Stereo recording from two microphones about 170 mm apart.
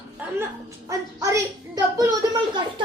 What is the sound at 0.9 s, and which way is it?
A woman's voice, 20° right (ahead or behind).